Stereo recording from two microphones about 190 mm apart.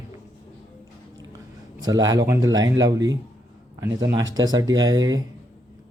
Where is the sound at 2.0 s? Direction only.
20° right (ahead or behind).